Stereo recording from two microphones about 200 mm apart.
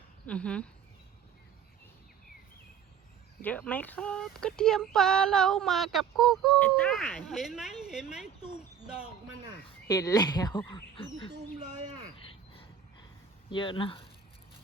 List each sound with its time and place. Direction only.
0.3 s speech: 5° left (ahead or behind)
3.4 s speech: 10° left (ahead or behind)
9.8 s speech: 15° left (ahead or behind)
13.5 s speech: 25° left (ahead or behind)